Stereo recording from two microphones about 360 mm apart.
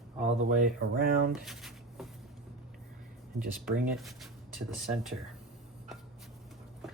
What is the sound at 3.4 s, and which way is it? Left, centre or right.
Speech, right.